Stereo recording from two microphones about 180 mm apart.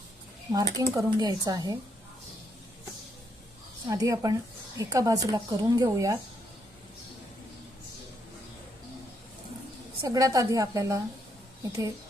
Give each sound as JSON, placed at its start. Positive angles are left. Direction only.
{"t": 0.5, "sound": "a woman's voice", "side_deg": -20}
{"t": 3.8, "sound": "a woman's voice", "side_deg": -20}
{"t": 10.0, "sound": "a woman's voice", "side_deg": -20}